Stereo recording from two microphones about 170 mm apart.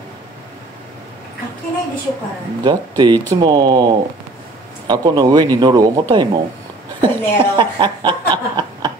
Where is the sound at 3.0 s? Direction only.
25° right (ahead or behind).